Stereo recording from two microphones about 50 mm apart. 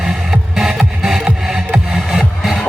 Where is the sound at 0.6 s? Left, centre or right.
Centre.